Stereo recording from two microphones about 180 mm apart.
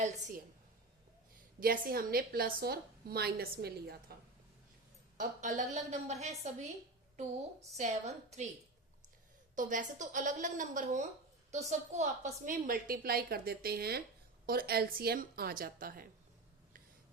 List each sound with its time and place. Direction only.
0.0 s a woman's voice: 45° right (ahead or behind)
1.5 s a woman's voice: 50° right (ahead or behind)
5.1 s a woman's voice: 45° right (ahead or behind)
7.8 s a woman's voice: 40° right (ahead or behind)
9.6 s a woman's voice: 45° right (ahead or behind)